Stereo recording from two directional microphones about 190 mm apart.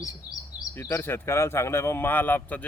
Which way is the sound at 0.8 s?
15° left (ahead or behind).